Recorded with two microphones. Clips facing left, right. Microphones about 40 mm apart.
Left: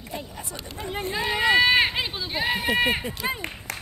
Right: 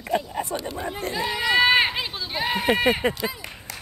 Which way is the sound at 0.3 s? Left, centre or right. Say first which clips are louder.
Right 10 dB; right.